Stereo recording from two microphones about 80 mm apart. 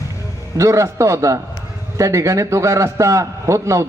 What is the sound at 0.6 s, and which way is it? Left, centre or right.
A man's voice, right.